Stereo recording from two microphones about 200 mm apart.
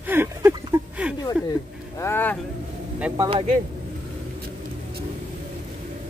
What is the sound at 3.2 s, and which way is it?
Speech, 25° right (ahead or behind).